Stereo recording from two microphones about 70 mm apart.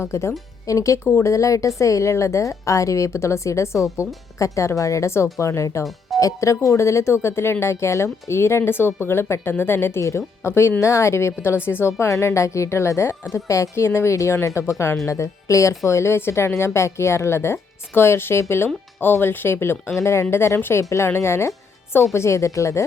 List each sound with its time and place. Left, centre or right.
0.0 s a woman's voice: left
10.0 s a woman's voice: left